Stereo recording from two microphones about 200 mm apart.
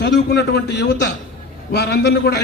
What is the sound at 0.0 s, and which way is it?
A man's voice, 55° left (ahead or behind).